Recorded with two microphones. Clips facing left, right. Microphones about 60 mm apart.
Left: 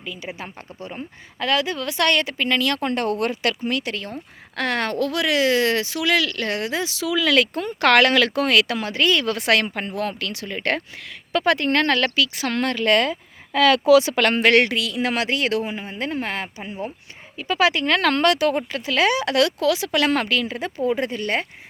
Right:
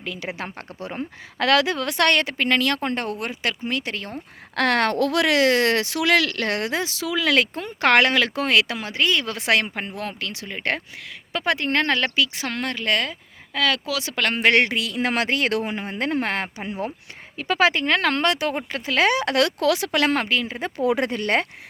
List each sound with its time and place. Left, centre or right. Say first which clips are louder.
0.0 s speech: right 2 dB; right
4.5 s speech: right 3 dB; right
12.5 s a woman's voice: left 5 dB; centre
13.8 s speech: left 14 dB; centre
14.4 s speech: right 1 dB; right
17.3 s speech: even; right
17.7 s speech: left 1 dB; right
18.7 s speech: even; right
20.0 s speech: left 1 dB; right
20.8 s speech: right 1 dB; right